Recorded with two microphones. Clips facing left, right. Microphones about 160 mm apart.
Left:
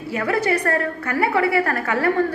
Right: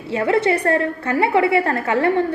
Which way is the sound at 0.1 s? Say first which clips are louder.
Right 3 dB; 25° right (ahead or behind).